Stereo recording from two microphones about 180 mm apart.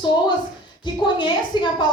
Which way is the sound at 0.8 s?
25° left (ahead or behind).